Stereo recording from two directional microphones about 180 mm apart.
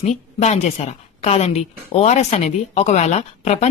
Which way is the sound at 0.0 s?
40° left (ahead or behind).